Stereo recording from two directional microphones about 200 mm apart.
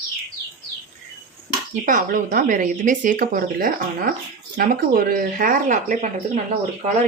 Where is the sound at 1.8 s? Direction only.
40° right (ahead or behind).